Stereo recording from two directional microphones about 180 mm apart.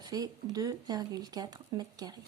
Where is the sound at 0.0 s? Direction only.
20° right (ahead or behind).